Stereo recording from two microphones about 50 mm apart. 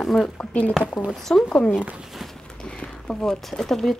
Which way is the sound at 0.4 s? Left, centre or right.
Left.